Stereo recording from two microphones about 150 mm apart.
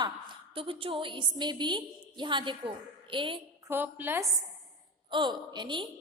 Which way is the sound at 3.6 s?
15° right (ahead or behind).